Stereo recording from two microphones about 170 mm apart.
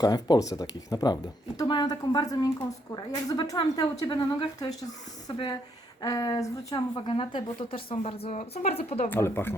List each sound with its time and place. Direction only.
0.0 s speech: 25° left (ahead or behind); by 8.8 s 45° left (ahead or behind)
9.0 s speech: 15° left (ahead or behind)